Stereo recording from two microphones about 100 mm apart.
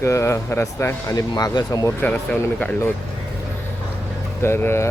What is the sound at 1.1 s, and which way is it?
Speech, 45° left (ahead or behind).